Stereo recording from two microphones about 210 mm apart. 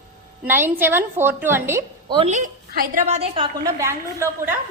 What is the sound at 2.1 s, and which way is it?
A woman's voice, 30° right (ahead or behind).